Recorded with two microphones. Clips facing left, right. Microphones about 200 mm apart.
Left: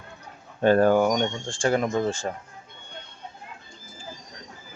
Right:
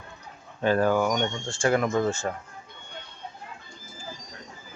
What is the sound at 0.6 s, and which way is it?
Speech, 50° left (ahead or behind).